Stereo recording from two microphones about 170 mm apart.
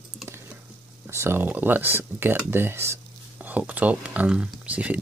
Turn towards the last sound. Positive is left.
turn(degrees=-10)  # may be behind; listen again after turning